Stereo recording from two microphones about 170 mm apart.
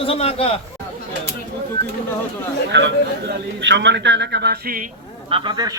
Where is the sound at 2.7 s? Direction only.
85° right; by 4.9 s 60° right (ahead or behind).